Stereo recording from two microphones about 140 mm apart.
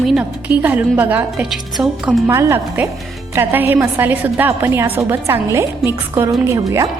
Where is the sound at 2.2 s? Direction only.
20° right (ahead or behind).